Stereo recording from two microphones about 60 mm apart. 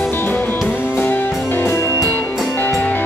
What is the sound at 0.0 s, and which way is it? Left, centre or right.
Music, left.